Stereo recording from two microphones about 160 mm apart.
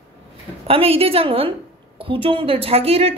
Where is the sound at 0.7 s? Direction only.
35° right (ahead or behind).